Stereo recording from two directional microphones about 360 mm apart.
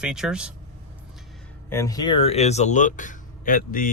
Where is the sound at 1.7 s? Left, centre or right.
Centre.